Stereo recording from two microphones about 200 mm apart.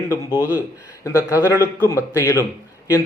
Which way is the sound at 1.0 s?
15° left (ahead or behind).